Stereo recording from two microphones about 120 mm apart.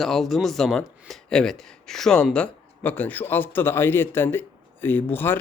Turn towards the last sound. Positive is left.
turn(degrees=15)  # may be behind; listen again after turning